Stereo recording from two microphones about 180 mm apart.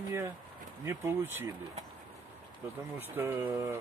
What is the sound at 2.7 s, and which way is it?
Speech, 10° right (ahead or behind).